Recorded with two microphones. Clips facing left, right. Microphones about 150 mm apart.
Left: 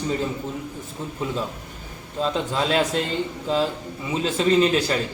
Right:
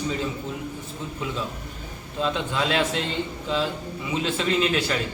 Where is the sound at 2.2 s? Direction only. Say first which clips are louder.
Left 2 dB; 35° left (ahead or behind).